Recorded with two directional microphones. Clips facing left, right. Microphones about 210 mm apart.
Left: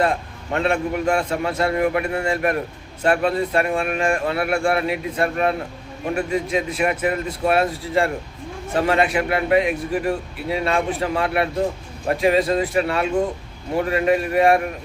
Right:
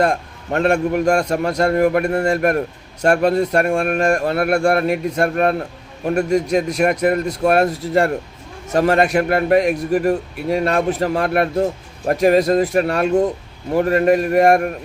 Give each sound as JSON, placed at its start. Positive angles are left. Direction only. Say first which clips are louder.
{"t": 0.0, "sound": "a man's voice", "louder": "right 3 dB", "side_deg": -45}